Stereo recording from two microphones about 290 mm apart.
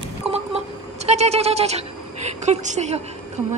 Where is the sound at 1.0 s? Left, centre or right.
Right.